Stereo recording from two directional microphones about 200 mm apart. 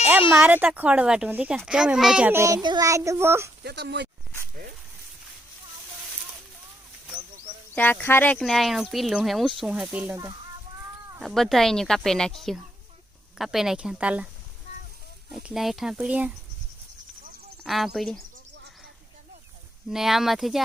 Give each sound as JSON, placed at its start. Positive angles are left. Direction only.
{"t": 0.3, "sound": "a child's voice", "side_deg": -10}
{"t": 3.6, "sound": "speech", "side_deg": -55}
{"t": 7.8, "sound": "a child's voice", "side_deg": 10}
{"t": 11.2, "sound": "speech", "side_deg": 0}
{"t": 15.3, "sound": "speech", "side_deg": 0}
{"t": 17.6, "sound": "speech", "side_deg": 0}
{"t": 19.9, "sound": "speech", "side_deg": 0}